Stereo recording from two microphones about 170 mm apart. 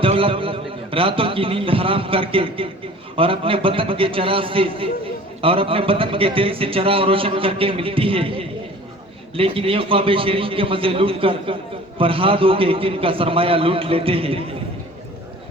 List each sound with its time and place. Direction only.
0.0 s a man's voice: 30° right (ahead or behind)